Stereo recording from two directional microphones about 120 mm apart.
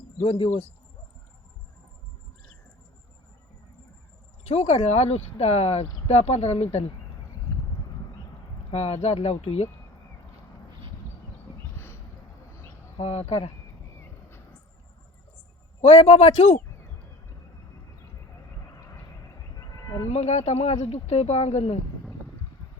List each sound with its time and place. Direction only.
0.2 s speech: 50° left (ahead or behind)
4.4 s speech: 65° left (ahead or behind)
8.7 s speech: 60° left (ahead or behind)
13.0 s speech: 60° left (ahead or behind)
15.8 s speech: 65° left (ahead or behind)
18.6 s vehicle: 25° left (ahead or behind)
19.5 s a sound: 25° left (ahead or behind)
20.1 s speech: 65° left (ahead or behind)